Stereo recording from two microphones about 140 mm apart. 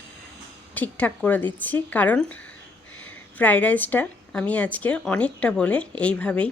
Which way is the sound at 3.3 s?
10° left (ahead or behind).